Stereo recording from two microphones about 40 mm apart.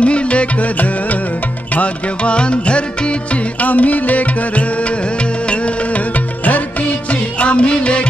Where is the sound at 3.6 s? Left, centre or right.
Left.